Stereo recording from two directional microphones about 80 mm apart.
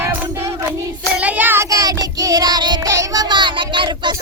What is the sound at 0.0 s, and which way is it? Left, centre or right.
Music, right.